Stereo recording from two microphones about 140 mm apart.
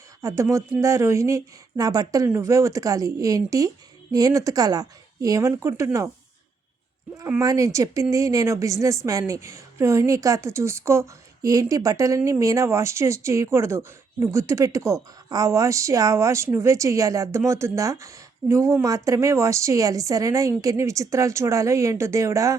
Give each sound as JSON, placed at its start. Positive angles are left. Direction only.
{"t": 0.2, "sound": "speech", "side_deg": -20}
{"t": 7.3, "sound": "speech", "side_deg": -25}